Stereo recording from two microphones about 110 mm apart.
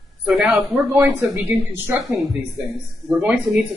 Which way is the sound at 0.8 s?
25° right (ahead or behind).